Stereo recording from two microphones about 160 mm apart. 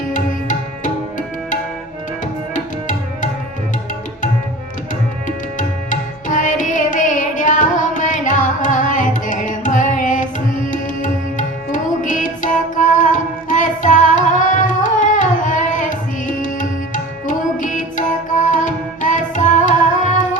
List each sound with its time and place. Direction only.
5.5 s music: 50° left (ahead or behind)